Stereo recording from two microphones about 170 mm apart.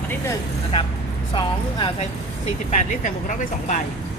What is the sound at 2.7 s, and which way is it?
Speech, 45° left (ahead or behind).